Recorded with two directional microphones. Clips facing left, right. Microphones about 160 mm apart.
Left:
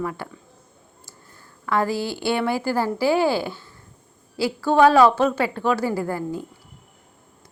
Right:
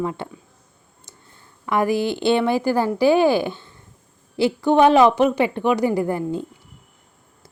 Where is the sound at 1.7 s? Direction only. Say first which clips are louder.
Right 3 dB; 15° right (ahead or behind).